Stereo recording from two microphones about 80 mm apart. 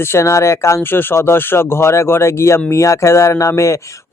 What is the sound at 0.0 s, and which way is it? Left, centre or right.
Speech, left.